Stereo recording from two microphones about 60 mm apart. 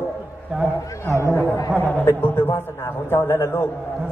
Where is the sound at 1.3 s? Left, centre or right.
Left.